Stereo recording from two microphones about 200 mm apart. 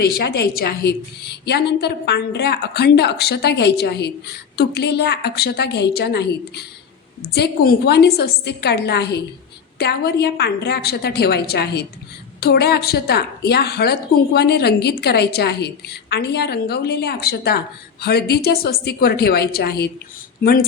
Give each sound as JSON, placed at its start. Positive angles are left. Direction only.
{"t": 0.2, "sound": "a woman's voice", "side_deg": 55}